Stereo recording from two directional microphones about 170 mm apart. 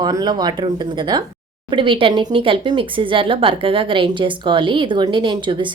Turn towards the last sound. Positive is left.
turn(degrees=-25)  # may be behind; listen again after turning